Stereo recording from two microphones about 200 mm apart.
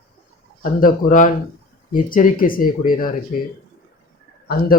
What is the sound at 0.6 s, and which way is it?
Speech, 45° left (ahead or behind).